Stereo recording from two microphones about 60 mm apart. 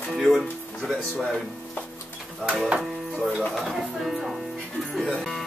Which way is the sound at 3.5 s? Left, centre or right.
Centre.